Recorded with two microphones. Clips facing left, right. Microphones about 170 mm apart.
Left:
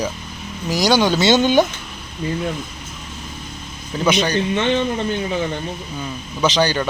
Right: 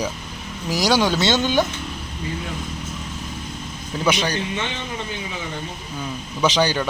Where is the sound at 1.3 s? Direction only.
15° left (ahead or behind).